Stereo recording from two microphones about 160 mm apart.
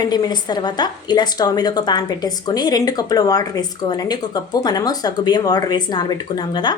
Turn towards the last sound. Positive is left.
turn(degrees=25)  # may be behind; listen again after turning